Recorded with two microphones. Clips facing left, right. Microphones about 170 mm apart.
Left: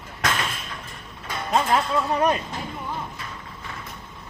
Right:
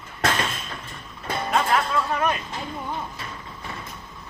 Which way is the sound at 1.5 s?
30° left (ahead or behind).